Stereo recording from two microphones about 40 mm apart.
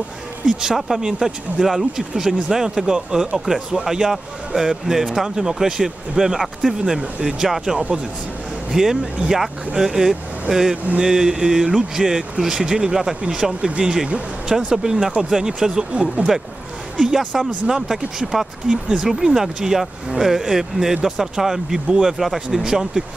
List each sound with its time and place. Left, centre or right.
0.5 s speech: centre
6.8 s speech: right
7.3 s speech: centre
8.7 s speech: centre
17.8 s speech: centre
18.7 s speech: right; by 22.6 s centre
22.6 s speech: centre